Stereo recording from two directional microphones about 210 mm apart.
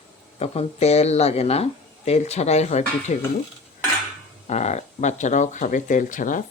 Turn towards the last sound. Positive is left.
turn(degrees=40)  # may be behind; listen again after turning